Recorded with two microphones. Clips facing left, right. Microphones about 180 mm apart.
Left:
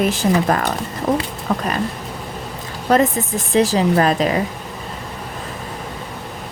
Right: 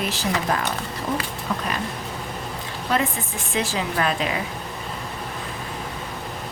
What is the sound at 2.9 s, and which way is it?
Speech, 40° left (ahead or behind).